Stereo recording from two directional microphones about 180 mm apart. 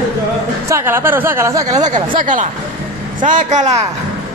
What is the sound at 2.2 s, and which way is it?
Speech, 45° right (ahead or behind).